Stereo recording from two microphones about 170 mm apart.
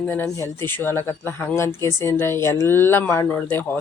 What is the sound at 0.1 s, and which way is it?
Speech, 15° left (ahead or behind).